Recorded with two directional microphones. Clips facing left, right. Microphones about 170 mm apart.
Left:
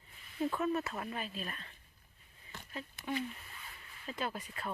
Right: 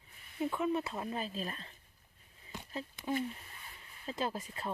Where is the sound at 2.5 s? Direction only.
15° right (ahead or behind).